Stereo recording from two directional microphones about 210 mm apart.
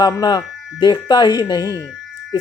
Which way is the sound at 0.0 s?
20° left (ahead or behind).